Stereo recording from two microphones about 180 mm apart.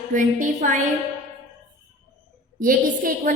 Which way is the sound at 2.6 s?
50° right (ahead or behind).